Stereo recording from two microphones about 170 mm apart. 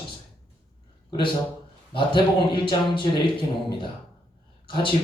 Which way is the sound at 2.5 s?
30° left (ahead or behind).